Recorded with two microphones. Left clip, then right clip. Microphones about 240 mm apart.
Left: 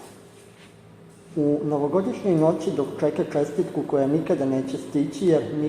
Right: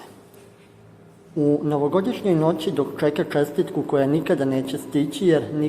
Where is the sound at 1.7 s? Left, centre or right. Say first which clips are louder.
Right 2 dB; right.